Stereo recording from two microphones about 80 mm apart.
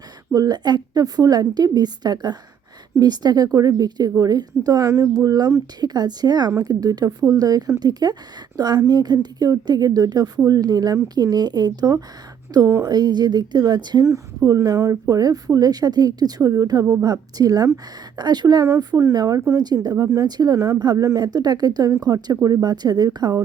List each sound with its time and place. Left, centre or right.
0.3 s a woman's voice: right
5.8 s a woman's voice: right
12.6 s a woman's voice: right
12.9 s a woman's voice: right
14.0 s a woman's voice: right